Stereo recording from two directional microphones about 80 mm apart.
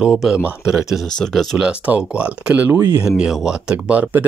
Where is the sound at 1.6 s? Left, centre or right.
Centre.